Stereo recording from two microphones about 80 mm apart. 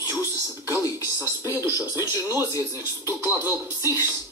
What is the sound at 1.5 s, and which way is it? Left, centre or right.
Speech, right.